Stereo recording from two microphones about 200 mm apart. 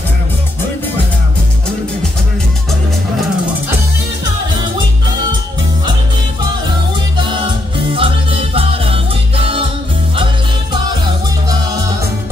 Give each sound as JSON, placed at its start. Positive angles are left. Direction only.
{"t": 7.2, "sound": "music", "side_deg": -25}